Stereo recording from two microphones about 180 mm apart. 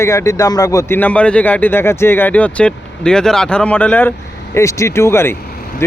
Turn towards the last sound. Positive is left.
turn(degrees=15)  # may be behind; listen again after turning